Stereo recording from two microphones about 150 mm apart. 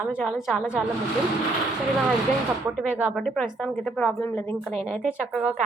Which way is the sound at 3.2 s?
Centre (ahead or behind).